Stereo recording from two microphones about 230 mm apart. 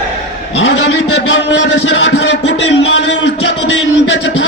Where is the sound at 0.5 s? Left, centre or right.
Left.